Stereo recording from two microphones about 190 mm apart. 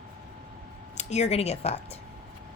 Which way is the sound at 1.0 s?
35° left (ahead or behind).